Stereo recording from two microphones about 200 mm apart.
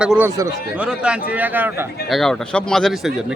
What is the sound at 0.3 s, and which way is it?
A man's voice, 15° right (ahead or behind).